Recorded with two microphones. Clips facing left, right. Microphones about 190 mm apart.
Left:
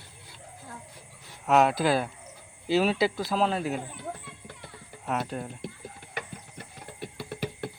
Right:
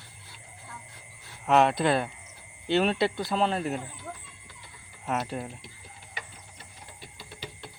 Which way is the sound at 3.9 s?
65° left (ahead or behind).